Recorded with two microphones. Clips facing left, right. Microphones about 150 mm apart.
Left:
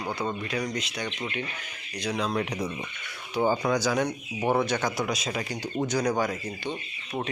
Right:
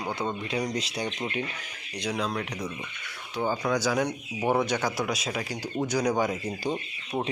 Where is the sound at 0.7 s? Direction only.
35° right (ahead or behind).